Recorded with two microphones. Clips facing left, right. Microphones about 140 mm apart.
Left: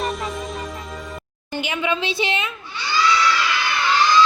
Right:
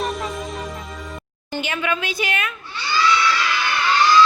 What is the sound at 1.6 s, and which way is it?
Speech, 15° left (ahead or behind).